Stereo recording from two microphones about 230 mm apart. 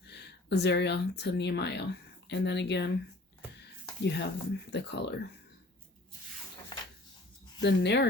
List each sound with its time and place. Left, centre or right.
0.1 s speech: left
4.0 s speech: left
7.6 s speech: left